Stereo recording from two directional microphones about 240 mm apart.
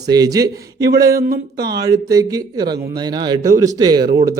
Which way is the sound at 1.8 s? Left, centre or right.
Centre.